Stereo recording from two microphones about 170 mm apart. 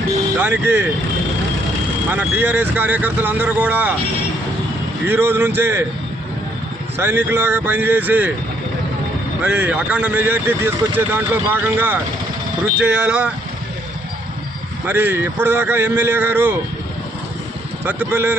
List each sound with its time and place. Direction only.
0.4 s speech: 10° right (ahead or behind)
2.0 s speech: 10° right (ahead or behind)
5.0 s speech: 10° right (ahead or behind)
7.0 s speech: 15° right (ahead or behind)
9.4 s speech: 10° right (ahead or behind)
14.9 s speech: 10° right (ahead or behind)
17.8 s speech: 10° right (ahead or behind)